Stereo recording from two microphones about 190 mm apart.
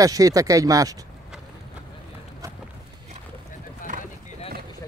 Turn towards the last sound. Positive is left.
turn(degrees=35)  # may be behind; listen again after turning